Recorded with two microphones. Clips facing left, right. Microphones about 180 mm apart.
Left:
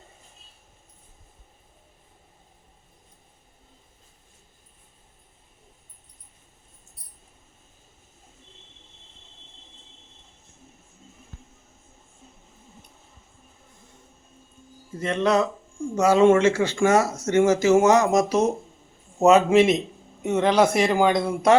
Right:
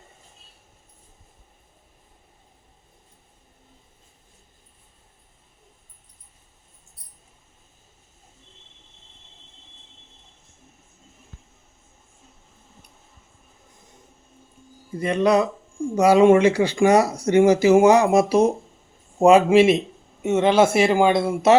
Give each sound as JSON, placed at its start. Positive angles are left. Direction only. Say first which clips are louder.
{"t": 14.9, "sound": "speech", "louder": "right 3 dB", "side_deg": -10}
{"t": 20.5, "sound": "speech", "louder": "right 2 dB", "side_deg": -25}
{"t": 20.9, "sound": "speech", "louder": "right 2 dB", "side_deg": -5}